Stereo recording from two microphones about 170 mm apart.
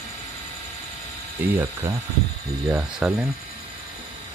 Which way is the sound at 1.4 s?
10° right (ahead or behind).